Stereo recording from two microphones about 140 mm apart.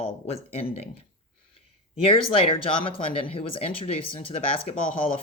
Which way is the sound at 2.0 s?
40° left (ahead or behind).